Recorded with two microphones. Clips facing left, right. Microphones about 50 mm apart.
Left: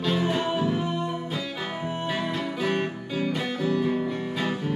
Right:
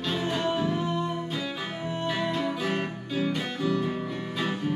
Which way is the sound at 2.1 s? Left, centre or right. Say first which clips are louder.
Even; centre.